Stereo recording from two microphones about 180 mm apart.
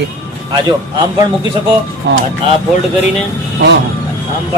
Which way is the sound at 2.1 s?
75° right (ahead or behind).